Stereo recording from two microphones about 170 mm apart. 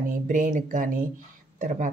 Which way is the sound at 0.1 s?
50° right (ahead or behind).